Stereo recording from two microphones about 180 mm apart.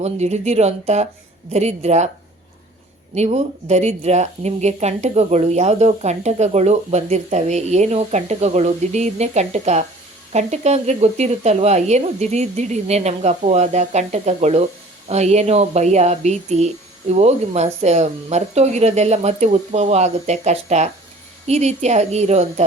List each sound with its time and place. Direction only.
0.0 s speech: 40° right (ahead or behind)
3.2 s speech: 40° right (ahead or behind)